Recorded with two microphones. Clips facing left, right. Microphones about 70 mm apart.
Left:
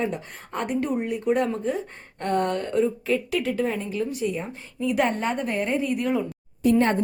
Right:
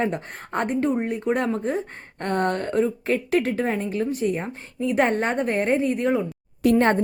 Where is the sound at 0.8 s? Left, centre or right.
Right.